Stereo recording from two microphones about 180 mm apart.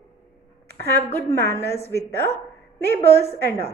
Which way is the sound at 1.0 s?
15° left (ahead or behind).